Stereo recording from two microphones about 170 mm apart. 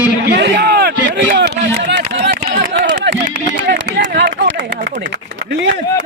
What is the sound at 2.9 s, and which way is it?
Run, 80° right.